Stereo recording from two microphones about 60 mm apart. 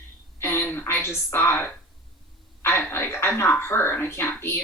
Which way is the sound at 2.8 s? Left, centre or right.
Left.